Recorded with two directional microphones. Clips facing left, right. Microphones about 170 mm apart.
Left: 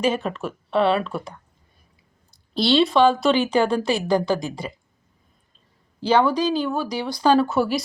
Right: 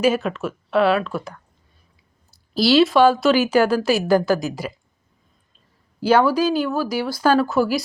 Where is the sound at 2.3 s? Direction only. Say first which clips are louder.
Right 3 dB; 5° right (ahead or behind).